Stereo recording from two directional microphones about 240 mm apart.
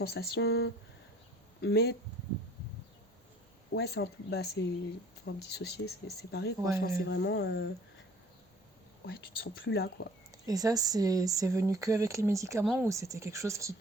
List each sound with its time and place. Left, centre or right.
0.0 s speech: left
3.7 s speech: left
9.0 s speech: left
10.4 s speech: centre